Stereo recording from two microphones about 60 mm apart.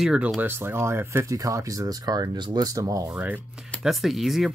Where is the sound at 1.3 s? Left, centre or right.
Right.